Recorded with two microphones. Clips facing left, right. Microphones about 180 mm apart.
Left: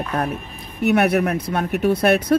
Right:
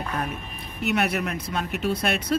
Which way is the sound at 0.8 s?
60° left (ahead or behind).